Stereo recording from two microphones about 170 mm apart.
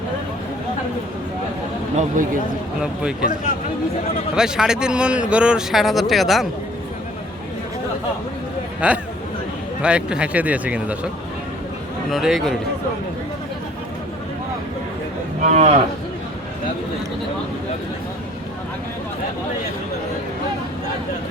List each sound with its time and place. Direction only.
2.0 s speech: 50° right (ahead or behind)
2.8 s a man's voice: 5° right (ahead or behind)
4.4 s a man's voice: 5° right (ahead or behind)
8.8 s speech: 5° right (ahead or behind)
12.1 s a man's voice: centre (ahead or behind)
15.4 s speech: 40° right (ahead or behind)